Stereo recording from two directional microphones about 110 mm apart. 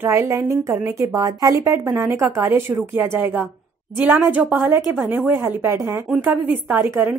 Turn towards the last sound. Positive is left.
turn(degrees=-20)  # may be behind; listen again after turning